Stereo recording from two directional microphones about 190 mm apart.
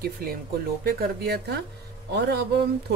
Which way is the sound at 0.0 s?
50° right (ahead or behind).